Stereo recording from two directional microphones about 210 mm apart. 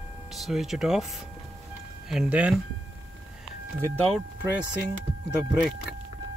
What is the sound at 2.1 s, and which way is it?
Speech, 5° right (ahead or behind).